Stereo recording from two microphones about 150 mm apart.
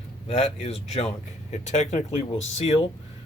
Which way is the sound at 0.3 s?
45° left (ahead or behind).